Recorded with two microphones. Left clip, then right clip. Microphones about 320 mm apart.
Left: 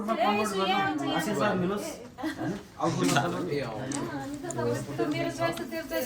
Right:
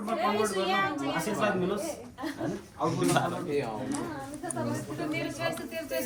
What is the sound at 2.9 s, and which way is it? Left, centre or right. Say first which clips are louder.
Speech: left 1 dB; centre.